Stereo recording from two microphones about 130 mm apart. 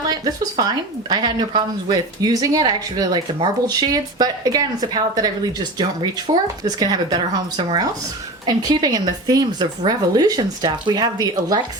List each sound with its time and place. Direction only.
0.1 s speech: 30° right (ahead or behind)